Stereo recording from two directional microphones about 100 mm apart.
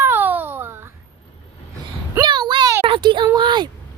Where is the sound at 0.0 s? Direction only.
20° right (ahead or behind).